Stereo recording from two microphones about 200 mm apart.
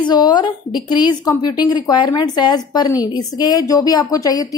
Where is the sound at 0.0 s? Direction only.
20° left (ahead or behind).